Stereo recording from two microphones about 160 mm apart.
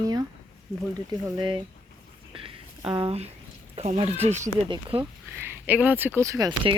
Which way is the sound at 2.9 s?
40° right (ahead or behind).